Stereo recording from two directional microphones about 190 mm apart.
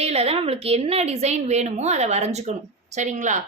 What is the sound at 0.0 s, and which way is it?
Speech, 30° right (ahead or behind).